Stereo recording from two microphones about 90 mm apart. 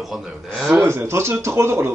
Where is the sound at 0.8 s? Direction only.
25° right (ahead or behind).